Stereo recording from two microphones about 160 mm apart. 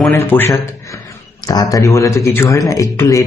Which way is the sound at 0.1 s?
15° left (ahead or behind).